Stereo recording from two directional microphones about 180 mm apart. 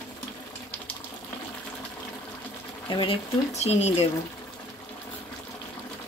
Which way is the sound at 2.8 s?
25° left (ahead or behind).